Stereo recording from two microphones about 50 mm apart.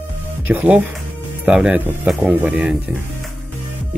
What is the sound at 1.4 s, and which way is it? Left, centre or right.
Speech, centre.